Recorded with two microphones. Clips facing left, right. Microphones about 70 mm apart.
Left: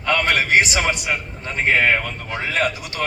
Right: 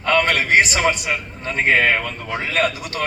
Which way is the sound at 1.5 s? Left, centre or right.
Right.